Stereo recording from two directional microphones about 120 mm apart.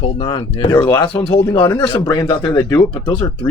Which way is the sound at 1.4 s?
30° left (ahead or behind).